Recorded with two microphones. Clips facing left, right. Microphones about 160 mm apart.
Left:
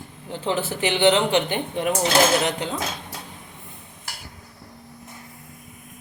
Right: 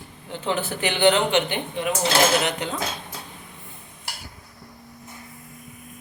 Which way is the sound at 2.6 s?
30° left (ahead or behind).